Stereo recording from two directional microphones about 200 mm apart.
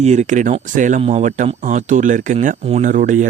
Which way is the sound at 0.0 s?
35° right (ahead or behind).